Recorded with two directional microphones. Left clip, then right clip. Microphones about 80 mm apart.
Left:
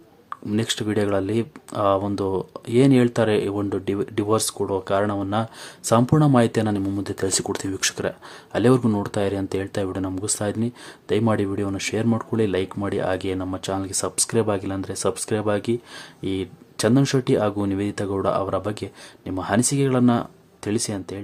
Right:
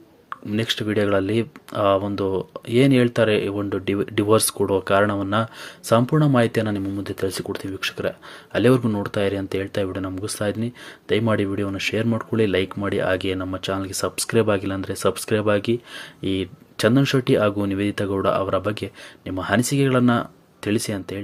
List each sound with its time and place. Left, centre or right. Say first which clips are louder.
0.3 s speech: right 1 dB; left
3.8 s speech: right 2 dB; centre
5.8 s speech: even; left
8.5 s speech: right 1 dB; left; by 21.2 s centre